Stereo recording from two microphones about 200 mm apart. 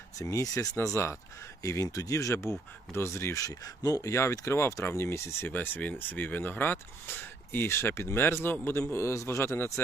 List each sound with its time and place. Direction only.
0.2 s speech: 15° left (ahead or behind)